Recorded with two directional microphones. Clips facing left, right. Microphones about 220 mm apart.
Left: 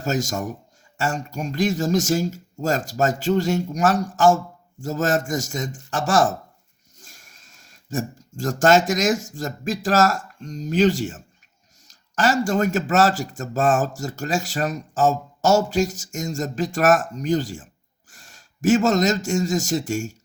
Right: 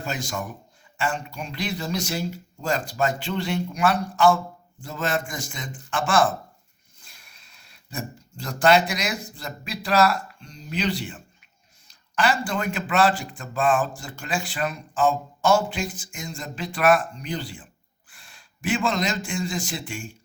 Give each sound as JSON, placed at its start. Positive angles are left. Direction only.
{"t": 0.0, "sound": "speech", "side_deg": 45}